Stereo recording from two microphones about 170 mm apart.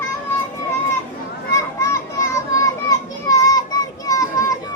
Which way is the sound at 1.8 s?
15° left (ahead or behind).